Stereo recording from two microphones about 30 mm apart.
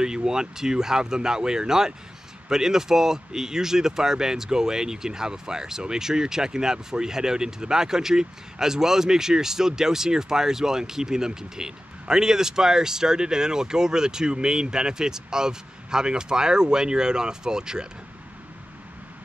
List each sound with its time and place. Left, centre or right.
0.0 s speech: right